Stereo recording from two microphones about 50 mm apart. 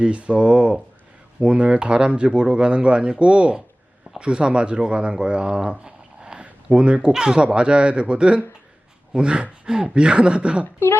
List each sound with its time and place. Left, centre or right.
0.0 s speech: right